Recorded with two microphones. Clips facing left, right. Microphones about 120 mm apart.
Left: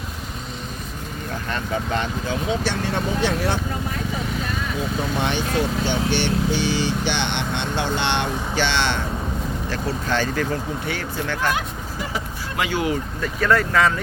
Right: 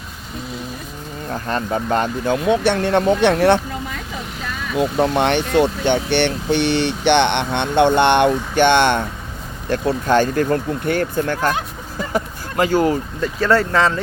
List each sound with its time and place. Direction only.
1.3 s speech: 35° right (ahead or behind); by 3.6 s 65° right (ahead or behind)
4.8 s speech: 60° right (ahead or behind); by 13.0 s 40° right (ahead or behind)
13.4 s speech: 30° right (ahead or behind)